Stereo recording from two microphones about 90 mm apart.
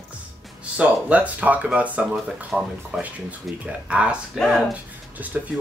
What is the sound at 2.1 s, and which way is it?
Speech, 5° right (ahead or behind).